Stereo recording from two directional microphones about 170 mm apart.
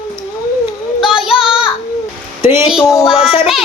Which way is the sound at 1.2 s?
5° right (ahead or behind).